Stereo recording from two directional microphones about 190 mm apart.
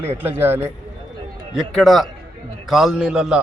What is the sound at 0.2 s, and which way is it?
Speech, 10° right (ahead or behind).